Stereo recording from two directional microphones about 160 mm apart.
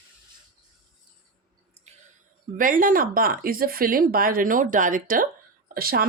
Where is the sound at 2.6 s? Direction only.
55° right (ahead or behind).